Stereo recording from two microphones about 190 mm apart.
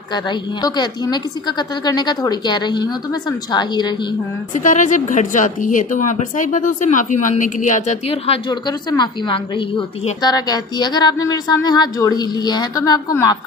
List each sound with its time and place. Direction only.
0.1 s a woman's voice: 20° left (ahead or behind)
4.6 s a woman's voice: 40° left (ahead or behind); by 13.4 s 20° left (ahead or behind)